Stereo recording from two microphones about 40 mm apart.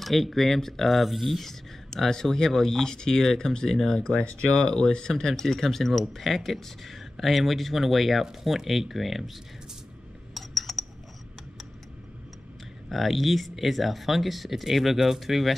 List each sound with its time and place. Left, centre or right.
0.0 s speech: centre
4.0 s speech: left
4.6 s speech: centre
10.3 s a sound: centre
12.9 s speech: centre